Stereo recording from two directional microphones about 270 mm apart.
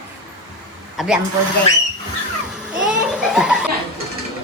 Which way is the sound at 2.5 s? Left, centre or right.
Centre.